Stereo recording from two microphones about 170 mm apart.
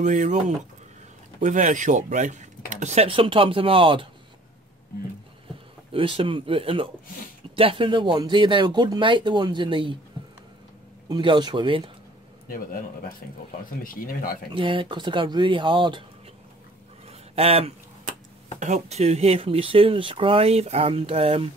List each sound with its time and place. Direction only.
0.0 s speech: 45° right (ahead or behind)
1.4 s speech: 45° right (ahead or behind); by 4.1 s 30° right (ahead or behind)
5.9 s speech: 30° right (ahead or behind)
11.1 s speech: 25° right (ahead or behind)
12.4 s a man's voice: 55° left (ahead or behind)
14.5 s speech: 30° right (ahead or behind)
17.1 s a sound: 35° right (ahead or behind)
18.6 s speech: 40° right (ahead or behind)